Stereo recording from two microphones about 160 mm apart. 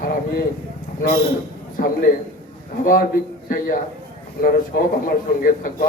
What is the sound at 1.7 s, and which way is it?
Speech, 65° left (ahead or behind).